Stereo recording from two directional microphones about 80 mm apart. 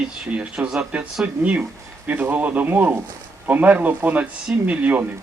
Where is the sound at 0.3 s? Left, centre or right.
Centre.